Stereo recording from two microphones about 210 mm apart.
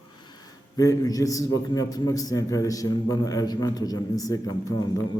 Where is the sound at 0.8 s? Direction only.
15° left (ahead or behind).